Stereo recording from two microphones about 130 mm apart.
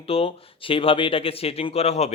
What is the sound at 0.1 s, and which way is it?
Speech, 45° left (ahead or behind).